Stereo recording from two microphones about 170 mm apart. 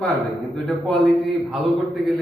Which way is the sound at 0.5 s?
5° left (ahead or behind).